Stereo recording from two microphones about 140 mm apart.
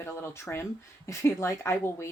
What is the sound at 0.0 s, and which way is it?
A woman's voice, 20° left (ahead or behind).